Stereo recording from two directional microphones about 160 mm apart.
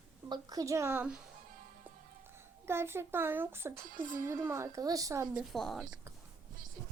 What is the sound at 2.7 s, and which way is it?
A child's voice, 15° right (ahead or behind).